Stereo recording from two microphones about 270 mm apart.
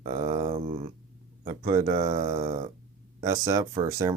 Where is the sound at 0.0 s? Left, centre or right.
Right.